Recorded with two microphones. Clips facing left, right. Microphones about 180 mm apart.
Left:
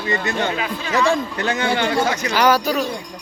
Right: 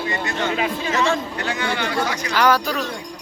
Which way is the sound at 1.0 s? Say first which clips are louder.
Left 3 dB; 15° left (ahead or behind).